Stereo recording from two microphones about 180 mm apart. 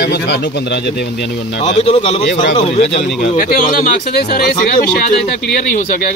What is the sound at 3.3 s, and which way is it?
A man's voice, 50° left (ahead or behind).